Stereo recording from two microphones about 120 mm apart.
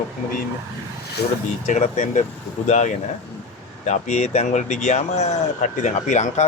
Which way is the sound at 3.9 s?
75° left (ahead or behind).